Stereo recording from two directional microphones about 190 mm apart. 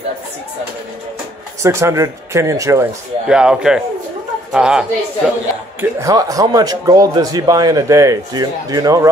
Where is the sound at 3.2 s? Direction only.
5° right (ahead or behind).